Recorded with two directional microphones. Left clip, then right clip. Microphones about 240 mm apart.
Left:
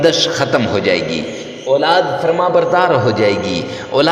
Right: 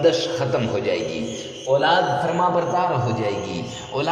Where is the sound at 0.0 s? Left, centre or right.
Left.